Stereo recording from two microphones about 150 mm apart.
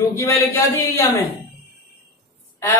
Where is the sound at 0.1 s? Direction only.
20° left (ahead or behind).